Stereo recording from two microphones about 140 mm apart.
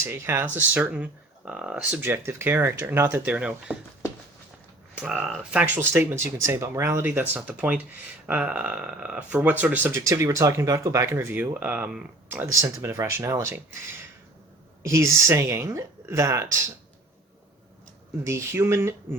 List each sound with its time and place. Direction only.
0.0 s speech: 20° right (ahead or behind)
4.9 s speech: 5° right (ahead or behind)
14.8 s a woman's voice: 20° right (ahead or behind)
18.2 s a woman's voice: 20° right (ahead or behind)